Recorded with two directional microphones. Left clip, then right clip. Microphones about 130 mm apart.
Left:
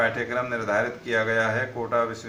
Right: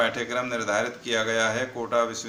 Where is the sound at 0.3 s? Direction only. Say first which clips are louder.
Left 1 dB; 25° right (ahead or behind).